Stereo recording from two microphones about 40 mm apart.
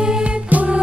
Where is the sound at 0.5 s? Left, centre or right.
Right.